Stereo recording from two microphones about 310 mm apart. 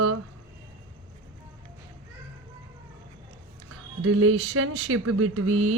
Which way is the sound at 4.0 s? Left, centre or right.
Right.